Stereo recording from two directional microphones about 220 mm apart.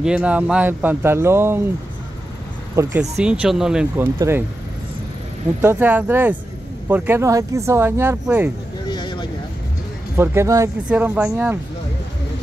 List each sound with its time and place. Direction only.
0.0 s speech: 5° right (ahead or behind)
2.7 s speech: 15° right (ahead or behind)
3.0 s speech: 5° right (ahead or behind)
5.6 s speech: 10° right (ahead or behind)
8.8 s vehicle: 20° left (ahead or behind)
10.1 s speech: 10° right (ahead or behind)